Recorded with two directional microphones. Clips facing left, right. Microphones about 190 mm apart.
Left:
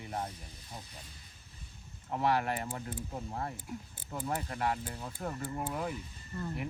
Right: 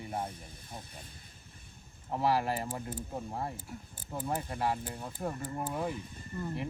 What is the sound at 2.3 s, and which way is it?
Speech, 30° right (ahead or behind).